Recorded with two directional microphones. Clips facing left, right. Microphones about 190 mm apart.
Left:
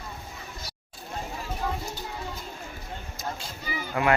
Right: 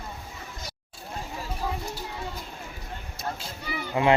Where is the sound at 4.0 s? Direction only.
25° right (ahead or behind).